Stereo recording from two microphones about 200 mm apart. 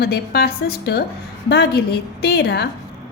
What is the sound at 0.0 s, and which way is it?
A woman's voice, 50° left (ahead or behind).